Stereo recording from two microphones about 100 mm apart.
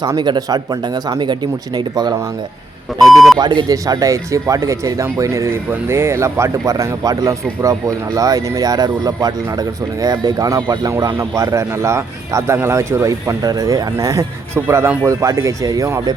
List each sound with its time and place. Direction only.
0.0 s speech: 45° right (ahead or behind)
3.1 s speech: centre (ahead or behind)
3.3 s speech: 45° right (ahead or behind)